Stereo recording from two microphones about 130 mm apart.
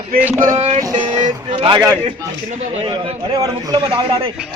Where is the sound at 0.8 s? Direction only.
35° right (ahead or behind).